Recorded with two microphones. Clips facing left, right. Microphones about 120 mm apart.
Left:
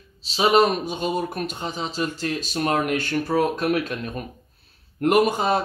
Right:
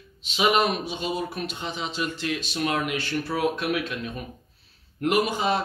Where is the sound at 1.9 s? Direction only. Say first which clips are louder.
Left 2 dB; 40° left (ahead or behind).